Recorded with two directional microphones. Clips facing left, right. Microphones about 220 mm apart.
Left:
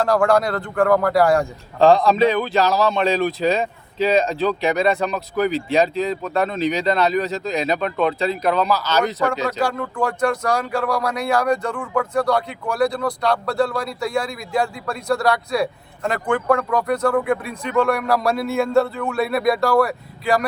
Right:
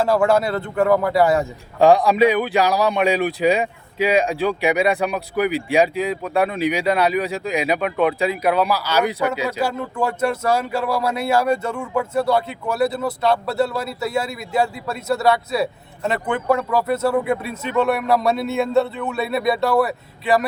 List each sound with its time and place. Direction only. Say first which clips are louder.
0.0 s a man's voice: even; 5° right (ahead or behind)
17.2 s speech: even; 25° right (ahead or behind)
17.7 s speech: even; 5° right (ahead or behind)